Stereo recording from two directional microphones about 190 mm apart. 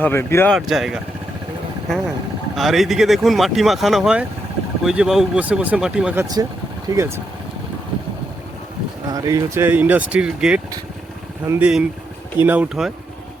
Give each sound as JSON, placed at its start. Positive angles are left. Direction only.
{"t": 0.0, "sound": "speech", "side_deg": 10}
{"t": 0.5, "sound": "speech", "side_deg": 0}
{"t": 2.6, "sound": "speech", "side_deg": 0}
{"t": 6.9, "sound": "speech", "side_deg": -20}
{"t": 9.0, "sound": "speech", "side_deg": -20}